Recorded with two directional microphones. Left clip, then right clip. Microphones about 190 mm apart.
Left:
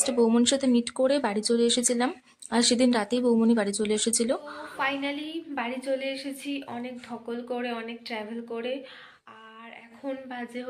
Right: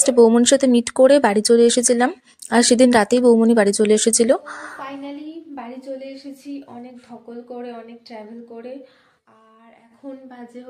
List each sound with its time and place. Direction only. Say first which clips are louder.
0.0 s speech: right 10 dB; 30° right (ahead or behind)
4.8 s a woman's voice: left 3 dB; 5° right (ahead or behind)
10.2 s speech: left 2 dB; 5° right (ahead or behind)